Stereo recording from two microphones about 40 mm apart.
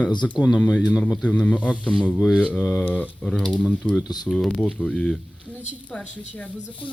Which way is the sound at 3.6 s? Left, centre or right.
Left.